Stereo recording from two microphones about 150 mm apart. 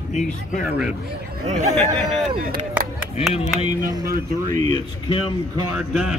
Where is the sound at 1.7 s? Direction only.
5° left (ahead or behind).